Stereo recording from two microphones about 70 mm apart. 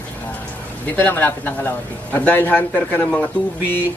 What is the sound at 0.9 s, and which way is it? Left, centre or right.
A man's voice, left.